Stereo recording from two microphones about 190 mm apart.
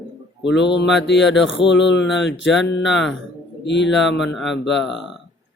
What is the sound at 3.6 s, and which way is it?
Mantra, 70° left (ahead or behind).